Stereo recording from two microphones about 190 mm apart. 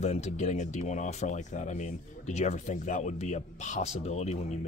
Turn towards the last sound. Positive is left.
turn(degrees=35)  # may be behind; listen again after turning